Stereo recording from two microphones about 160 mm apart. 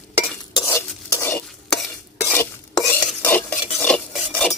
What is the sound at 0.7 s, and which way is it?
Stir, 20° left (ahead or behind).